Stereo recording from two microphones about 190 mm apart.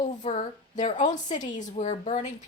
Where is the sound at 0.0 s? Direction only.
40° left (ahead or behind).